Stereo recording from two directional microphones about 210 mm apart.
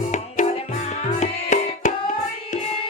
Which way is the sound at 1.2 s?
35° left (ahead or behind).